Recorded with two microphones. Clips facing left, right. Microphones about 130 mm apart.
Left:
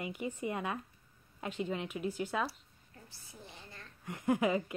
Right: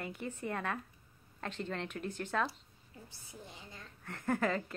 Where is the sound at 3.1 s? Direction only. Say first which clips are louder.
Right 1 dB; 20° right (ahead or behind).